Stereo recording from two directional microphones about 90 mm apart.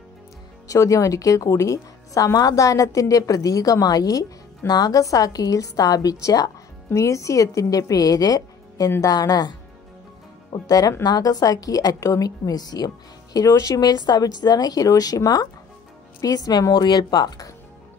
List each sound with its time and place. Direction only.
0.7 s speech: 35° left (ahead or behind)